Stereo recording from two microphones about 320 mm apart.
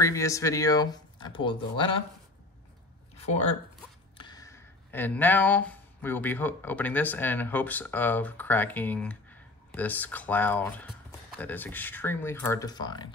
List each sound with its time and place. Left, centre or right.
0.0 s speech: centre
3.2 s a sound: left
4.2 s speech: centre